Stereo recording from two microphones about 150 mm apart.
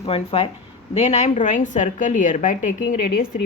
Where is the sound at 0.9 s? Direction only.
50° left (ahead or behind).